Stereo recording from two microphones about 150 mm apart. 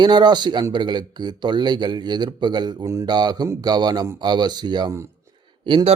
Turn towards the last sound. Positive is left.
turn(degrees=-35)  # may be behind; listen again after turning